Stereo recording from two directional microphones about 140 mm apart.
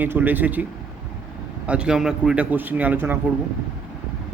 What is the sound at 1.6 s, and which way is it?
A man's voice, 10° right (ahead or behind).